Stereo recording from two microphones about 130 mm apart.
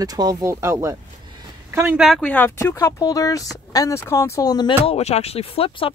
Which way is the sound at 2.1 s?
15° left (ahead or behind).